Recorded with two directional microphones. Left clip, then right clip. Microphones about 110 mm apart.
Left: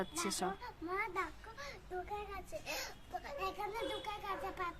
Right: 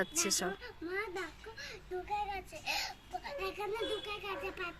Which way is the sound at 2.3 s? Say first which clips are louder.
Right 5 dB; 40° left (ahead or behind).